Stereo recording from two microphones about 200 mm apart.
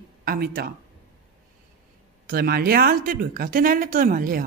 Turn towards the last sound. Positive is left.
turn(degrees=-45)  # may be behind; listen again after turning